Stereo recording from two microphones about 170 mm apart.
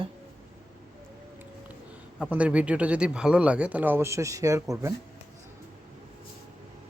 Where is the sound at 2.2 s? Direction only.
10° right (ahead or behind).